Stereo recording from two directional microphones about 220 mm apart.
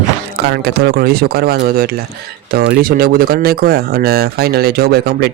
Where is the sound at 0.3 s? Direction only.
50° right (ahead or behind).